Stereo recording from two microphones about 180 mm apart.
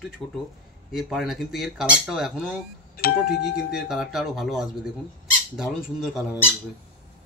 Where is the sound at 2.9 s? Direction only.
60° left (ahead or behind).